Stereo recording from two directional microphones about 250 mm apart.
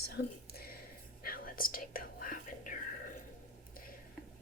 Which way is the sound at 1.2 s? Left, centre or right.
Left.